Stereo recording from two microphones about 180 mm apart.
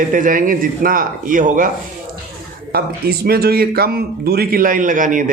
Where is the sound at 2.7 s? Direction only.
60° right (ahead or behind).